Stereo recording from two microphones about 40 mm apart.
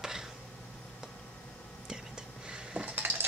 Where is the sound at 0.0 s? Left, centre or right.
Centre.